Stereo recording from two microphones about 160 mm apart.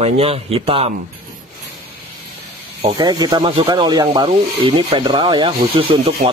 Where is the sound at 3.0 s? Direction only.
25° right (ahead or behind).